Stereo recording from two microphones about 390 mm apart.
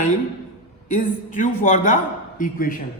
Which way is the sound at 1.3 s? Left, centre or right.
Centre.